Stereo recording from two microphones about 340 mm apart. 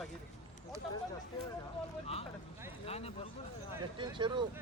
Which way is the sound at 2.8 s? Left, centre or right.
Centre.